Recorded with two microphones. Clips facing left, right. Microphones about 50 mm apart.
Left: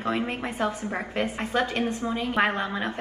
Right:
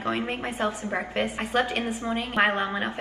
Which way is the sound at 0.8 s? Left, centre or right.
Right.